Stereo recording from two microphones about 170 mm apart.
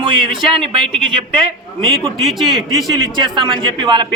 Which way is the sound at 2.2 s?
Centre (ahead or behind).